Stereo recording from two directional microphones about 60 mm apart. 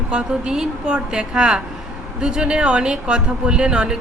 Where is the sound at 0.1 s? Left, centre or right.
Centre.